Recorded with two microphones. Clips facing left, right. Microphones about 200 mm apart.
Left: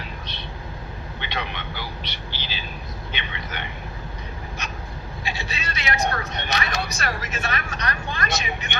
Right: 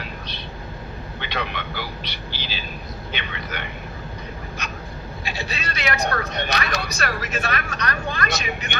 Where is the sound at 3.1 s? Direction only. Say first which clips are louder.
Right 3 dB; 40° right (ahead or behind).